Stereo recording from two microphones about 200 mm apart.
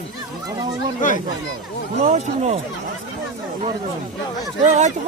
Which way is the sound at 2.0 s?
35° right (ahead or behind).